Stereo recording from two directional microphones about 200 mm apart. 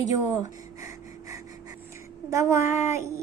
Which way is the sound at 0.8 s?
15° right (ahead or behind).